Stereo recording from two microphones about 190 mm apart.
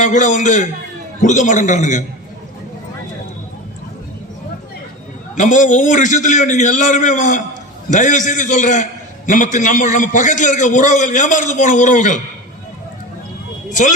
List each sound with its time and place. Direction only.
0.0 s a man's voice: 40° left (ahead or behind)
5.4 s a man's voice: 40° left (ahead or behind)